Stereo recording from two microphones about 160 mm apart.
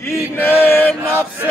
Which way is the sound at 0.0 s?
15° left (ahead or behind).